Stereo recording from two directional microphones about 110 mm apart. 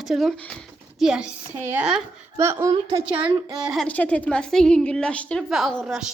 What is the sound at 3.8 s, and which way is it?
A woman's voice, 10° left (ahead or behind).